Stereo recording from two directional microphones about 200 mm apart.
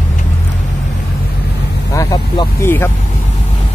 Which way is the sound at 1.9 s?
20° left (ahead or behind).